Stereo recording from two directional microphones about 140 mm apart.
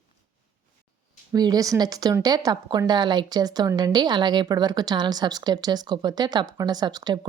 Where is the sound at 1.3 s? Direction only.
25° right (ahead or behind).